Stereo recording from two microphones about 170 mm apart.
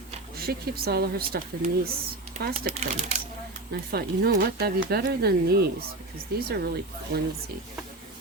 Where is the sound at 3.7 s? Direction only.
70° right (ahead or behind).